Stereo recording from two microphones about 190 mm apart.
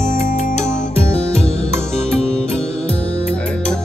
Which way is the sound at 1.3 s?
35° left (ahead or behind).